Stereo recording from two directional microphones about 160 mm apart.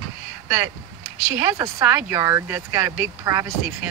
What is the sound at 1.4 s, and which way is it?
Speech, 15° right (ahead or behind).